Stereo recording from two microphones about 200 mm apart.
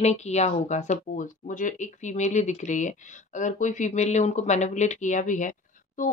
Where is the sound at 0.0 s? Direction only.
35° left (ahead or behind).